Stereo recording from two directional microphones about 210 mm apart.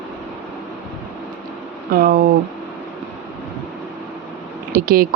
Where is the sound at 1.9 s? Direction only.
40° right (ahead or behind).